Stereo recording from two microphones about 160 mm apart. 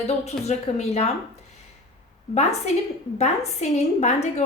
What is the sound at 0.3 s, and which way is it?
Speech, 40° left (ahead or behind).